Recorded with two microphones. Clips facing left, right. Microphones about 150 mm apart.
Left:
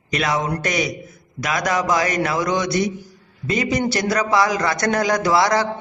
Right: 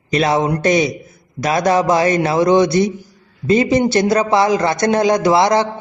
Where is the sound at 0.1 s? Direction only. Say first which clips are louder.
Right 6 dB; 30° right (ahead or behind).